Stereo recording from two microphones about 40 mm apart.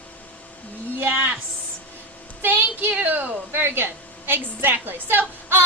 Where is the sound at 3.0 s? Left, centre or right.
Right.